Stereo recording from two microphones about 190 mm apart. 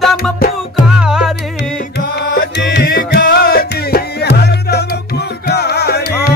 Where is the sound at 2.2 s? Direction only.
50° left (ahead or behind).